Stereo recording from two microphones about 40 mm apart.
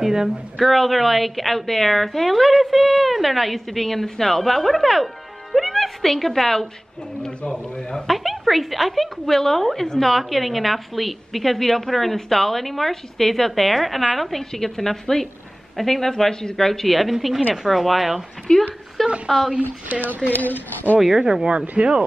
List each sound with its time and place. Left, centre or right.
0.0 s speech: centre
0.6 s a man's voice: centre
8.1 s a man's voice: centre
18.5 s speech: left
19.2 s speech: centre
20.2 s speech: left
21.2 s speech: centre